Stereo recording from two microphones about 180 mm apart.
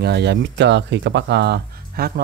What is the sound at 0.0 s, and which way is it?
Speech, 70° right (ahead or behind).